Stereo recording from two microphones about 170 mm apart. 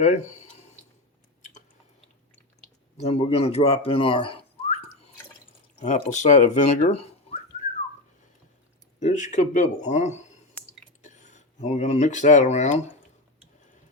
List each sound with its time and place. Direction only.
0.0 s speech: 45° left (ahead or behind)
3.0 s speech: 35° left (ahead or behind)
5.8 s speech: 45° left (ahead or behind)
9.0 s speech: 45° left (ahead or behind)